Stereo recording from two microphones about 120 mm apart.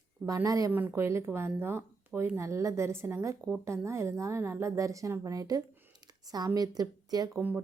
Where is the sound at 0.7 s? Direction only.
15° right (ahead or behind); by 7.4 s 30° right (ahead or behind).